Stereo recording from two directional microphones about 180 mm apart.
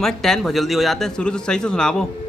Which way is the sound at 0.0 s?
Centre (ahead or behind).